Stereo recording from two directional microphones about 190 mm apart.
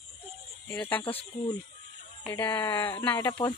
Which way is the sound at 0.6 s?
10° left (ahead or behind).